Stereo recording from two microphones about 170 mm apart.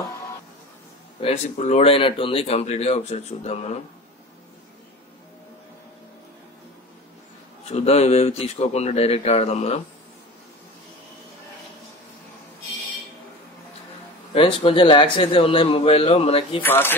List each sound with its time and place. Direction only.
1.2 s speech: 40° left (ahead or behind)
7.6 s speech: 40° left (ahead or behind)
14.3 s speech: 30° left (ahead or behind)
16.6 s speech: 10° left (ahead or behind)